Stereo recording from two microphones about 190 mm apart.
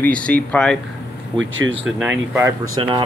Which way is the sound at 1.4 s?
90° right.